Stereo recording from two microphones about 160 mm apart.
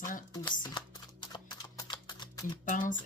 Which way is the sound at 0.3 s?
25° left (ahead or behind).